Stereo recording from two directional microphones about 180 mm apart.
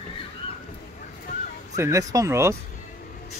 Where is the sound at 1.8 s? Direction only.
20° right (ahead or behind).